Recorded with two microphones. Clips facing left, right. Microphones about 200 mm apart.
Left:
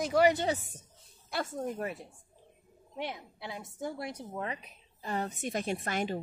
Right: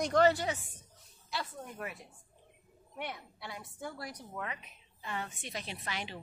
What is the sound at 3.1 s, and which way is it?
A woman's voice, 15° left (ahead or behind).